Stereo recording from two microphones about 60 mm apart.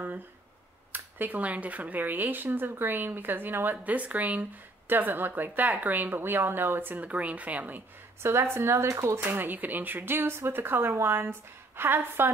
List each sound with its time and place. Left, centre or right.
0.9 s speech: right
8.2 s speech: right
9.3 s speech: right
10.9 s speech: right